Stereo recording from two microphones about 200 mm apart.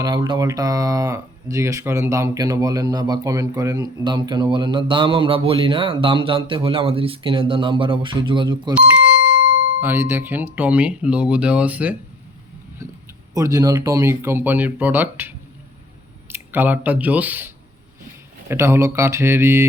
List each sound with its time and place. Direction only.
0.0 s speech: 20° right (ahead or behind)
9.8 s speech: 10° right (ahead or behind)
12.8 s a sound: 15° right (ahead or behind)
13.3 s speech: 15° right (ahead or behind)